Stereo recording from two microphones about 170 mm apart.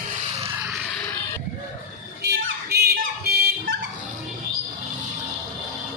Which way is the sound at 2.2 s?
75° right (ahead or behind).